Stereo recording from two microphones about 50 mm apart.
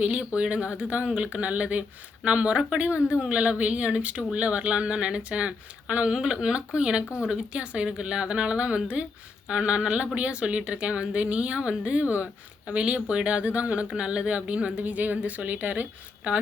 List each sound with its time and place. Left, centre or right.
0.3 s speech: right